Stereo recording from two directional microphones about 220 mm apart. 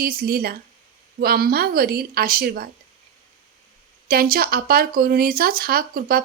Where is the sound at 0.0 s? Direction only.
40° right (ahead or behind).